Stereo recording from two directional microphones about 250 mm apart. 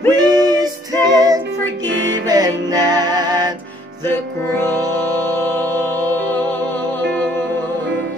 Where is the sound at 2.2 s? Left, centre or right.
Centre.